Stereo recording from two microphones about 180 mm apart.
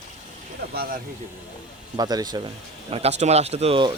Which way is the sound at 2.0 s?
20° right (ahead or behind).